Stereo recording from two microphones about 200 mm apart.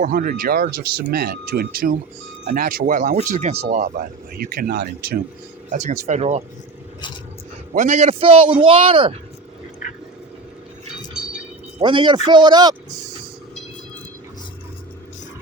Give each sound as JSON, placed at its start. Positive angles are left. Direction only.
{"t": 0.0, "sound": "a man's voice", "side_deg": -45}
{"t": 4.4, "sound": "speech", "side_deg": -50}
{"t": 5.7, "sound": "a man's voice", "side_deg": -35}
{"t": 7.7, "sound": "a man's voice", "side_deg": -35}
{"t": 11.8, "sound": "a man's voice", "side_deg": -25}